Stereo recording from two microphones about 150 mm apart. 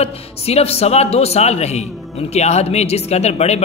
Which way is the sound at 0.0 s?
45° left (ahead or behind).